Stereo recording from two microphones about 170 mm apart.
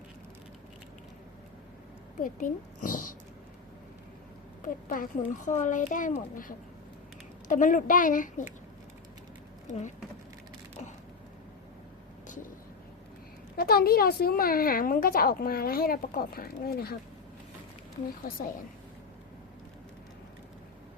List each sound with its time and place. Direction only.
2.1 s speech: 55° left (ahead or behind)
4.6 s speech: 55° left (ahead or behind)
13.6 s a woman's voice: 60° left (ahead or behind)